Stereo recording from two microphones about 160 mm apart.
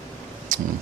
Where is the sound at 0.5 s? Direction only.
55° right (ahead or behind).